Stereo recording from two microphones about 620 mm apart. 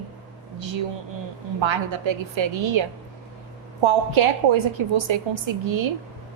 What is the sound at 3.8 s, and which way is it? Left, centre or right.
A woman's voice, right.